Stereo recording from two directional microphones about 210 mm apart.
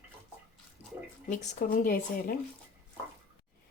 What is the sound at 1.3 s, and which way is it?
Speech, 35° left (ahead or behind).